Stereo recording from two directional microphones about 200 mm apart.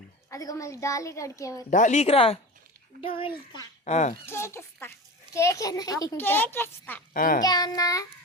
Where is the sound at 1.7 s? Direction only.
35° left (ahead or behind).